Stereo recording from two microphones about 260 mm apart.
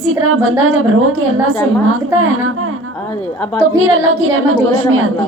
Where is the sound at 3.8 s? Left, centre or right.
Right.